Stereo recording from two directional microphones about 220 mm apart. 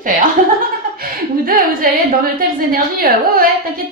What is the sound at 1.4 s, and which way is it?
Speech, 40° right (ahead or behind).